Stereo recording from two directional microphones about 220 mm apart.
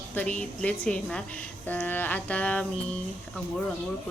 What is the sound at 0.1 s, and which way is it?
A woman's voice, 5° left (ahead or behind).